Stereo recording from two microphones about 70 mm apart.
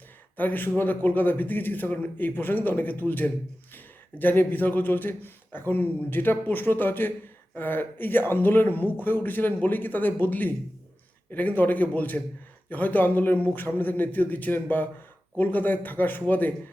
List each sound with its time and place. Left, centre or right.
0.3 s a man's voice: left